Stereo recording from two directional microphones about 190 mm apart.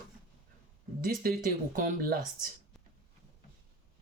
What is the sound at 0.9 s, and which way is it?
Speech, 50° right (ahead or behind).